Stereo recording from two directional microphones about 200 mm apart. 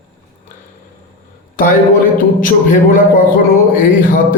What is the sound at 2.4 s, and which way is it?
Speech, 40° left (ahead or behind).